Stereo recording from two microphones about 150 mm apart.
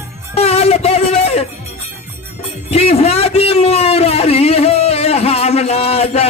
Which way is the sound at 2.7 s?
45° left (ahead or behind).